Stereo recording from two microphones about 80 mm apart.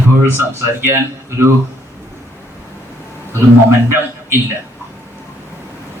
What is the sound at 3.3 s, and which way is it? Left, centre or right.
Speech, right.